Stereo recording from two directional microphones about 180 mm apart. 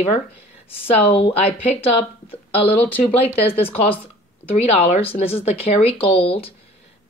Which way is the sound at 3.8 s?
30° left (ahead or behind).